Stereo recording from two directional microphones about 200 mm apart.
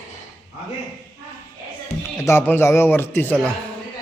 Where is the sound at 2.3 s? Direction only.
10° left (ahead or behind).